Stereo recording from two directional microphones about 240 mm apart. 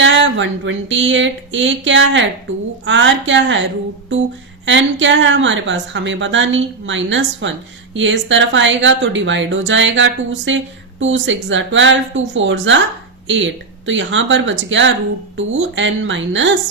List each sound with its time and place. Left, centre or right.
0.0 s a woman's voice: right